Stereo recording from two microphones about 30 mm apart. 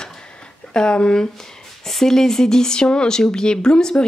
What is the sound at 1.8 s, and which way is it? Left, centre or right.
A woman's voice, centre.